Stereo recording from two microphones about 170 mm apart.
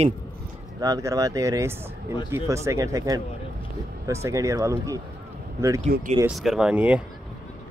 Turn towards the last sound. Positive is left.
turn(degrees=-5)  # may be behind; listen again after turning